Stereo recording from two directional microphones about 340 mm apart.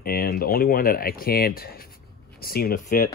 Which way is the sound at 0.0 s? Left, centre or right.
Left.